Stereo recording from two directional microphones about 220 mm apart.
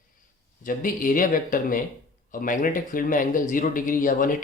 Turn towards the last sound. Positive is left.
turn(degrees=35)  # may be behind; listen again after turning